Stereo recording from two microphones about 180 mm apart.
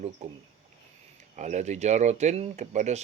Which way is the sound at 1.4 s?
40° right (ahead or behind).